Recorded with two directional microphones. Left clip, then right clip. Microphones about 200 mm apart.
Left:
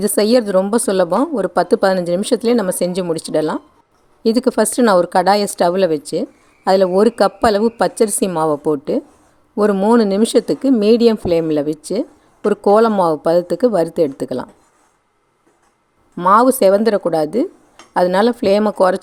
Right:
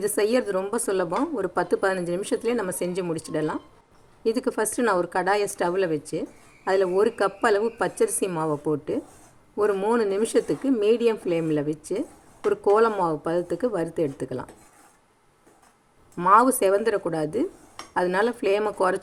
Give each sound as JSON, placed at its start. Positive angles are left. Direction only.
{"t": 0.0, "sound": "a woman's voice", "side_deg": 50}
{"t": 16.1, "sound": "a woman's voice", "side_deg": 45}